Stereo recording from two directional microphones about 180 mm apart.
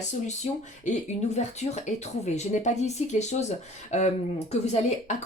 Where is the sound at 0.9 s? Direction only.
40° left (ahead or behind).